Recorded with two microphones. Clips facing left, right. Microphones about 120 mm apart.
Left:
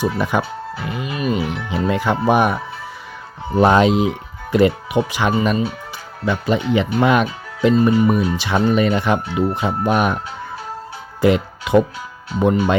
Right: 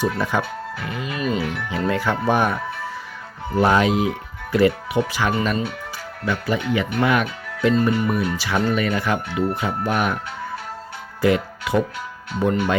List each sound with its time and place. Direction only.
0.0 s speech: 15° left (ahead or behind)
11.2 s speech: 20° left (ahead or behind)